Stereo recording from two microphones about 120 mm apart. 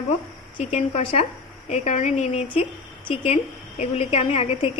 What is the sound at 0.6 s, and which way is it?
A woman's voice, 70° left (ahead or behind).